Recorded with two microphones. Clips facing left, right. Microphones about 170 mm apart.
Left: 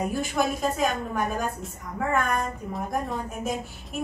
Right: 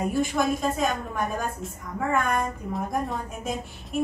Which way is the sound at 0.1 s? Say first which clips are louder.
Right 2 dB; centre (ahead or behind).